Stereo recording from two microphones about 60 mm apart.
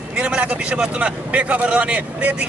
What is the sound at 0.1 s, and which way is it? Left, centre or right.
A man's voice, centre.